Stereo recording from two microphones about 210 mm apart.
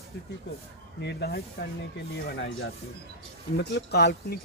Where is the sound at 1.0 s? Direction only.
55° left (ahead or behind).